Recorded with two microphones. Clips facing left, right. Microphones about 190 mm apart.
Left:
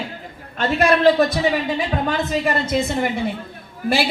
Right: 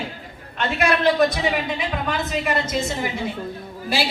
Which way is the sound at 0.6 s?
40° left (ahead or behind).